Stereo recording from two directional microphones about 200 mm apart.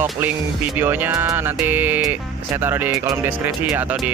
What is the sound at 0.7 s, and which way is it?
Speech, 10° right (ahead or behind).